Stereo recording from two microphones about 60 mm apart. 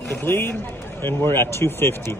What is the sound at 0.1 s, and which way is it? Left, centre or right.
A man's voice, left.